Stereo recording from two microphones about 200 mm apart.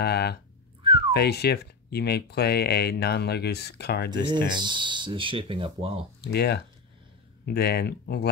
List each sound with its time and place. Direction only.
0.0 s speech: 55° left (ahead or behind)
0.8 s whistling: 25° right (ahead or behind)
1.1 s speech: 55° left (ahead or behind)
4.3 s speech: 25° right (ahead or behind)
6.2 s speech: 55° left (ahead or behind)